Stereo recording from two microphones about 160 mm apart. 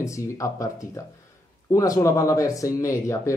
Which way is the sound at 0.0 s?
20° left (ahead or behind).